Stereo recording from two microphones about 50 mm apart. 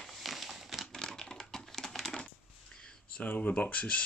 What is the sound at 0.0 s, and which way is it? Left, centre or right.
Crumpling, centre.